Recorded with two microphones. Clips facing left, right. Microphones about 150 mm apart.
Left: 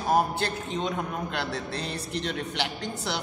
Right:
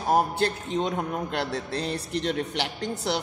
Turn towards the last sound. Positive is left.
turn(degrees=-40)  # may be behind; listen again after turning